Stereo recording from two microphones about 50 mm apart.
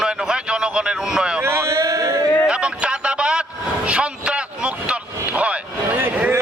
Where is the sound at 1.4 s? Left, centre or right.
Right.